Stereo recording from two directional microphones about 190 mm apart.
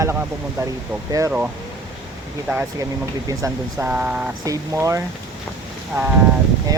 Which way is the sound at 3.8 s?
5° right (ahead or behind).